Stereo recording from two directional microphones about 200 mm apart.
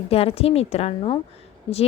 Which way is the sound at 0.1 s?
30° left (ahead or behind).